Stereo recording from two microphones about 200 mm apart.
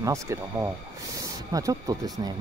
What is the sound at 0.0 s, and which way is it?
Speech, 15° right (ahead or behind).